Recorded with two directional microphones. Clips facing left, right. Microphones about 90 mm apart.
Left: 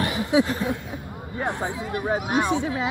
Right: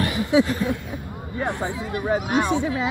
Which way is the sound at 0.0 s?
25° left (ahead or behind).